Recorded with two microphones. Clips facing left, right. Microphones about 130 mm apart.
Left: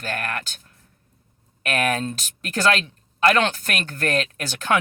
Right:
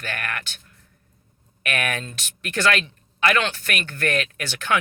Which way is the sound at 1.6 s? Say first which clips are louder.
Left 4 dB; 35° left (ahead or behind).